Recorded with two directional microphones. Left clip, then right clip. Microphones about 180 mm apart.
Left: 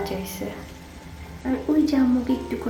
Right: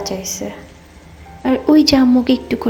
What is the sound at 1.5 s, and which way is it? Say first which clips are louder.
Speech: right 10 dB; 40° right (ahead or behind).